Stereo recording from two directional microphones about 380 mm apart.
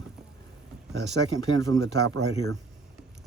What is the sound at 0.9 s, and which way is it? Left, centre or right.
Speech, right.